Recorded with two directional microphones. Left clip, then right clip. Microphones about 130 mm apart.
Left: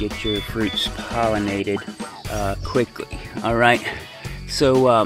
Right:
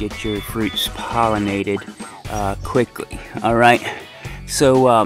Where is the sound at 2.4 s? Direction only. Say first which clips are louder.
Right 3 dB; 50° right (ahead or behind).